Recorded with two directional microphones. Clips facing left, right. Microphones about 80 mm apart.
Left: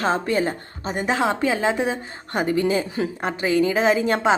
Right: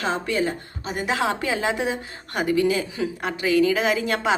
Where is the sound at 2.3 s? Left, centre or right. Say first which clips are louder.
Even; left.